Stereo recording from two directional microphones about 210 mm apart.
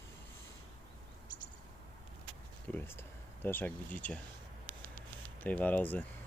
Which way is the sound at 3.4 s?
10° left (ahead or behind).